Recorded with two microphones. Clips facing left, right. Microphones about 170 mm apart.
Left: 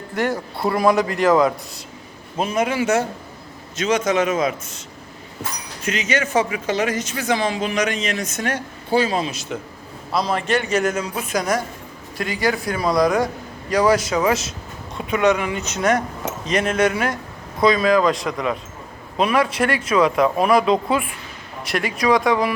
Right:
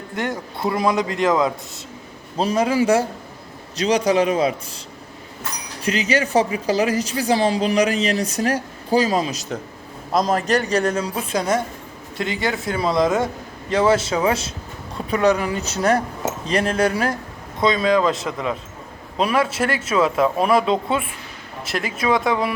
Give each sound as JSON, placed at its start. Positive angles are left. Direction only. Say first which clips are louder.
{"t": 0.2, "sound": "a man's voice", "louder": "left 3 dB", "side_deg": -20}
{"t": 2.4, "sound": "a woman's voice", "louder": "right 2 dB", "side_deg": -35}
{"t": 5.8, "sound": "a woman's voice", "louder": "right 2 dB", "side_deg": -35}
{"t": 21.7, "sound": "a man's voice", "louder": "left 2 dB", "side_deg": -25}